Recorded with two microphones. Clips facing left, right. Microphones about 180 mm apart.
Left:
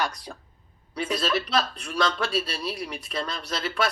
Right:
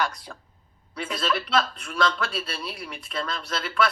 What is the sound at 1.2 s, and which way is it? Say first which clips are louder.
A man's voice: right 3 dB; 35° left (ahead or behind).